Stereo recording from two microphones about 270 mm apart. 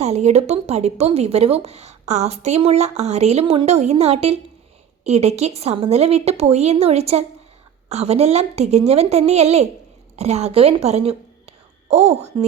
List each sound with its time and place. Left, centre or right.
0.0 s a woman's voice: right